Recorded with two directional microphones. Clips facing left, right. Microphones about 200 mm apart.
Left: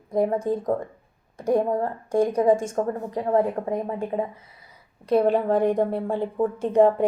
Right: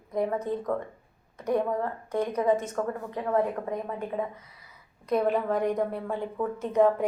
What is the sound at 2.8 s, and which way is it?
A woman's voice, 30° left (ahead or behind).